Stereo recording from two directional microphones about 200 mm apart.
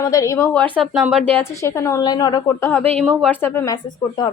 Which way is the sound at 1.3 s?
15° left (ahead or behind).